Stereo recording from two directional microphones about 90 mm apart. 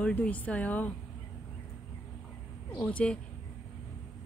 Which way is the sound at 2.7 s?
15° left (ahead or behind).